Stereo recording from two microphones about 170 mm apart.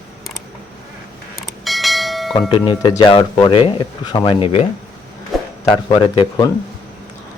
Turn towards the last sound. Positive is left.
turn(degrees=30)  # may be behind; listen again after turning